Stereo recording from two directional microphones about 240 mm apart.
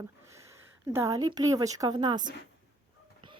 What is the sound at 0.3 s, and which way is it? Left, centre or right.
A woman's voice, centre.